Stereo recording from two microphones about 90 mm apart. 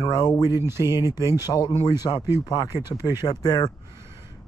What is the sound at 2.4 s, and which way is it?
Speech, 50° left (ahead or behind).